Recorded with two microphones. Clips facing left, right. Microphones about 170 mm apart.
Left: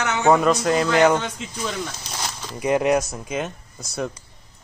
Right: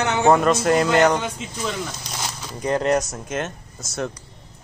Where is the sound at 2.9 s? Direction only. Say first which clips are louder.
Even; centre (ahead or behind).